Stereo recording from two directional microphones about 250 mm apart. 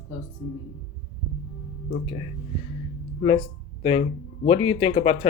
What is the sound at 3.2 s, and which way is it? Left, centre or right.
Speech, left.